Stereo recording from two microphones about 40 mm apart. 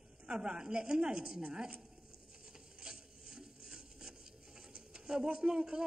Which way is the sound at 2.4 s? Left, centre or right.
Centre.